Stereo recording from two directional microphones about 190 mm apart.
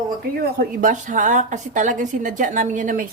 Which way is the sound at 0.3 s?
50° right (ahead or behind).